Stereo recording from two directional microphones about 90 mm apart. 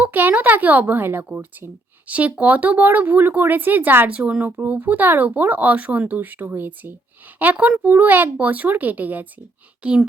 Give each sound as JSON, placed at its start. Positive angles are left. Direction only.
{"t": 0.0, "sound": "speech", "side_deg": -20}